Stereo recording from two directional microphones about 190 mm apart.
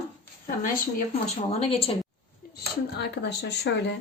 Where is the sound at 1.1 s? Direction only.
35° left (ahead or behind).